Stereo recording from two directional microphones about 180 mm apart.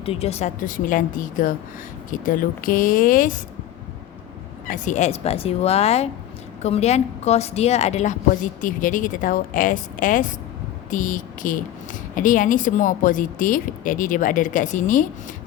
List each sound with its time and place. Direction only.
0.0 s speech: 35° left (ahead or behind); by 3.3 s 50° left (ahead or behind)
4.6 s a woman's voice: 45° left (ahead or behind)